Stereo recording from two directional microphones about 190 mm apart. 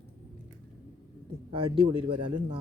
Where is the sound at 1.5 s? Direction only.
25° right (ahead or behind).